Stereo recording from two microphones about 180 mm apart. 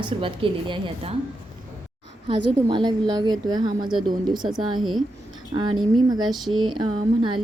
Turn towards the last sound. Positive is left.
turn(degrees=-25)  # may be behind; listen again after turning